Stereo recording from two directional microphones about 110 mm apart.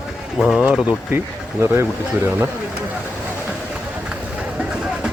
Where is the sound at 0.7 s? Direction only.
10° right (ahead or behind).